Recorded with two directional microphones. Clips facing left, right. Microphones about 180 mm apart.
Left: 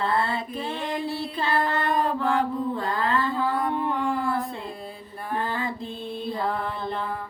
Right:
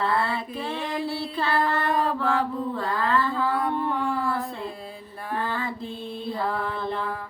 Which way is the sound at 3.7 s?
15° left (ahead or behind).